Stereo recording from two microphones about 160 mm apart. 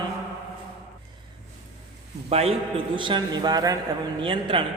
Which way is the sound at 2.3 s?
40° right (ahead or behind).